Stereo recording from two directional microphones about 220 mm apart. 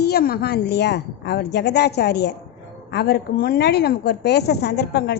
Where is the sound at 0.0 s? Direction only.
45° left (ahead or behind).